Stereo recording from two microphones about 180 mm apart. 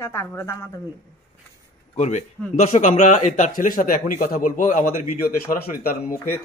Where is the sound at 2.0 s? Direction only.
40° left (ahead or behind).